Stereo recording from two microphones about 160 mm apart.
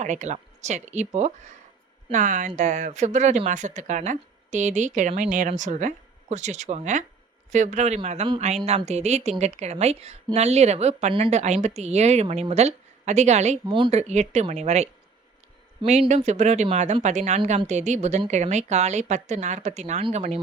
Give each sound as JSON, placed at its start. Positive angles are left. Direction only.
{"t": 0.0, "sound": "a woman's voice", "side_deg": -50}
{"t": 13.7, "sound": "a woman's voice", "side_deg": -30}
{"t": 14.0, "sound": "a woman's voice", "side_deg": -45}
{"t": 16.0, "sound": "a woman's voice", "side_deg": -45}